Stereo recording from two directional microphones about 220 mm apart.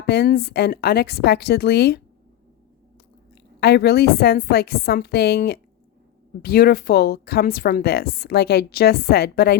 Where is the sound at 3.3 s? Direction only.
50° left (ahead or behind).